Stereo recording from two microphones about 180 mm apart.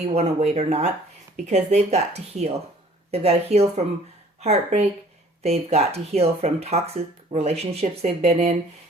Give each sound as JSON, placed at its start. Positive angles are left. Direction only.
{"t": 0.0, "sound": "speech", "side_deg": -35}